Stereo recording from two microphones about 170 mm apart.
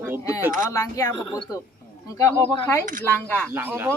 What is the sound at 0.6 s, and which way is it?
Speech, 15° left (ahead or behind).